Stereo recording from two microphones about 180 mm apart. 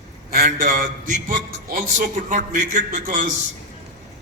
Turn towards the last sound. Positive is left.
turn(degrees=-45)  # may be behind; listen again after turning